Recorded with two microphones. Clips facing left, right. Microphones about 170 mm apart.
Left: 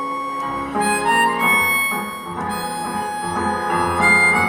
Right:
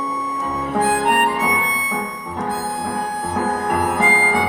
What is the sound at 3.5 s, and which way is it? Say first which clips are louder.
Harmonica: right 1 dB; 25° right (ahead or behind).